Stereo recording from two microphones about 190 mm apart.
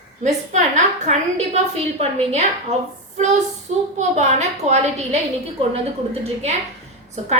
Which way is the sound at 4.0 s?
40° right (ahead or behind).